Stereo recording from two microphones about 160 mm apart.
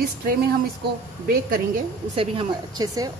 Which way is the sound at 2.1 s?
30° right (ahead or behind).